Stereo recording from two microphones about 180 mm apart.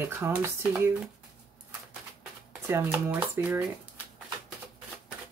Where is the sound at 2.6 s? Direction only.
15° right (ahead or behind).